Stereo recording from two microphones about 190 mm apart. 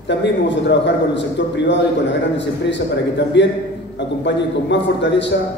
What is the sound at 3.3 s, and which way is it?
A man's voice, 70° left (ahead or behind).